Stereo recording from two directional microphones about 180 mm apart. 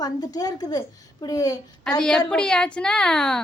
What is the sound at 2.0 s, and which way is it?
A woman's voice, 5° left (ahead or behind).